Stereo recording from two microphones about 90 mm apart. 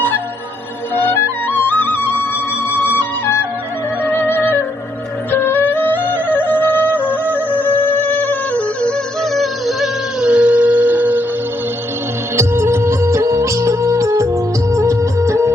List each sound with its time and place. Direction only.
0.9 s music: 25° left (ahead or behind)
9.3 s howl: centre (ahead or behind); by 11.2 s 20° right (ahead or behind)
12.4 s music: 30° right (ahead or behind)
14.7 s music of bollywood: 35° right (ahead or behind)